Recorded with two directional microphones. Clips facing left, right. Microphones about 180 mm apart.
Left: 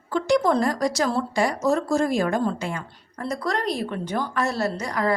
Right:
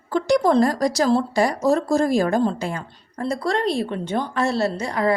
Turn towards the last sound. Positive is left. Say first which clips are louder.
# right 3 dB
turn(degrees=-25)  # may be behind; listen again after turning